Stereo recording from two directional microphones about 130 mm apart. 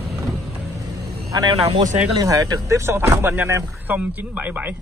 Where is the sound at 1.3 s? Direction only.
30° right (ahead or behind).